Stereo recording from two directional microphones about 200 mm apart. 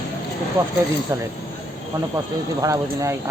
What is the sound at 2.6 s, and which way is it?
Speech, 15° right (ahead or behind).